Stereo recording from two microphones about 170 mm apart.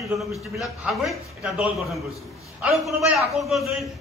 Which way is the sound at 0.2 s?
Centre (ahead or behind).